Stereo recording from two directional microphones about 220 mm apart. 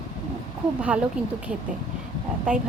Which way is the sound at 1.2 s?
5° right (ahead or behind).